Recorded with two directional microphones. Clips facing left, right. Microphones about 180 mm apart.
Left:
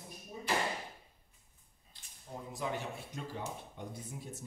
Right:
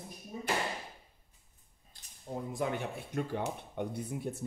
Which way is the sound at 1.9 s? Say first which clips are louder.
Right 1 dB; 45° right (ahead or behind).